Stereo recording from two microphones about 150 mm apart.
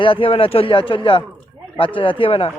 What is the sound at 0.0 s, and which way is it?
Speech, 35° left (ahead or behind).